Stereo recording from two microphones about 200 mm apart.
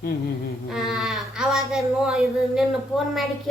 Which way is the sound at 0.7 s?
Centre (ahead or behind).